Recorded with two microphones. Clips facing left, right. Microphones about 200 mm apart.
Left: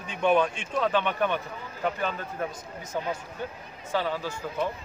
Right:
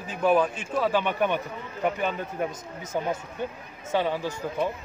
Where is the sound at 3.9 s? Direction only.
20° right (ahead or behind).